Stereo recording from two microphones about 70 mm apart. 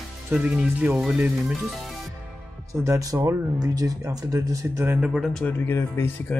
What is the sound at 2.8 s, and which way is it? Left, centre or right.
Speech, right.